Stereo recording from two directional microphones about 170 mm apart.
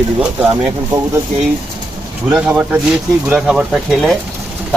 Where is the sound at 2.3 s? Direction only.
5° right (ahead or behind).